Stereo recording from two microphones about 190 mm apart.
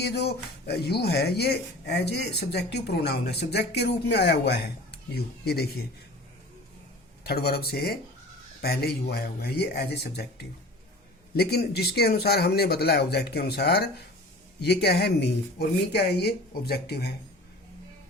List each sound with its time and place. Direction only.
0.0 s speech: 60° left (ahead or behind)
7.3 s speech: 55° left (ahead or behind)